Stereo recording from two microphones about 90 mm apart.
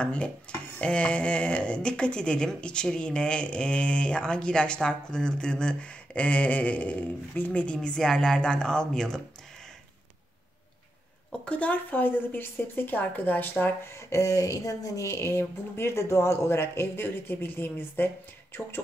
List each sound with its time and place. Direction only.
0.0 s speech: 10° left (ahead or behind)
11.4 s speech: 15° left (ahead or behind)
14.1 s speech: 40° left (ahead or behind)